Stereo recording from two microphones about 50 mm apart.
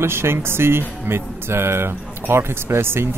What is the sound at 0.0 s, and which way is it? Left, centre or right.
Speech, right.